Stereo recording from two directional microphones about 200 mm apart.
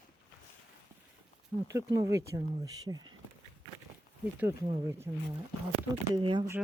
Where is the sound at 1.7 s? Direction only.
15° right (ahead or behind).